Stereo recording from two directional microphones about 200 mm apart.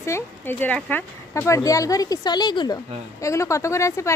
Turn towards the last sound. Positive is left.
turn(degrees=15)  # may be behind; listen again after turning